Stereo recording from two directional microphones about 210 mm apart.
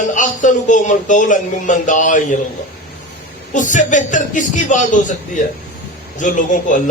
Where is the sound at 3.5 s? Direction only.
35° left (ahead or behind).